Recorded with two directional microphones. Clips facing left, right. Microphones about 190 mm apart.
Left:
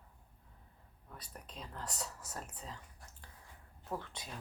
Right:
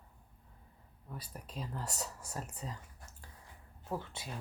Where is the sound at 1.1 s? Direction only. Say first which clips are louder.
Right 5 dB; 5° right (ahead or behind).